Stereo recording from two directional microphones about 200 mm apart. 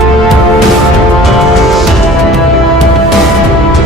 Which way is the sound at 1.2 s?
Centre (ahead or behind).